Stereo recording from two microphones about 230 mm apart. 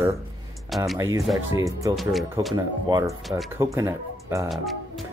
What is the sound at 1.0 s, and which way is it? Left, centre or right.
Speech, centre.